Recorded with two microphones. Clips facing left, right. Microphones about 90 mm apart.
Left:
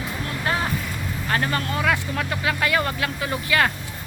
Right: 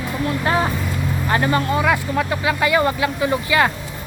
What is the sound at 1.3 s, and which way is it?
Speech, 20° right (ahead or behind).